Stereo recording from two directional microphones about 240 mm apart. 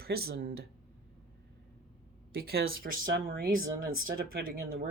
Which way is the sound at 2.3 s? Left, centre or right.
Right.